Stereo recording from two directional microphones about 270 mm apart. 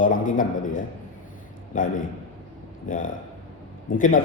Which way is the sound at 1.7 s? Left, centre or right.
Left.